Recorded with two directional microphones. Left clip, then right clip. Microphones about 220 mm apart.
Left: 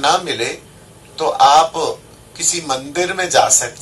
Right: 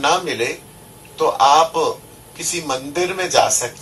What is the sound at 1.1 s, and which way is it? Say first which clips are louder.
A man's voice: left 2 dB; 30° left (ahead or behind).